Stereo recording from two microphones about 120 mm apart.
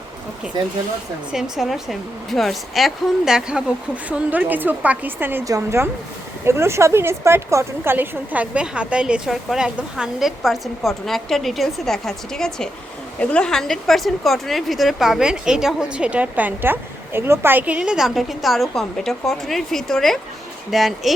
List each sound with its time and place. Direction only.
1.3 s a woman's voice: 5° right (ahead or behind)